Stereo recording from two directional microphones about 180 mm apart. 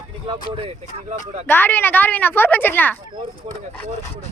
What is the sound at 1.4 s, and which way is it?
Speech, 10° left (ahead or behind).